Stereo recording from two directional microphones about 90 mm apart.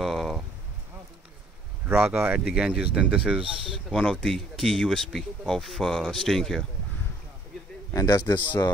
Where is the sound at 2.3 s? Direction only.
10° right (ahead or behind).